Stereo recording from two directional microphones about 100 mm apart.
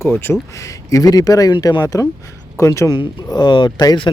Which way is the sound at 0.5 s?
30° left (ahead or behind).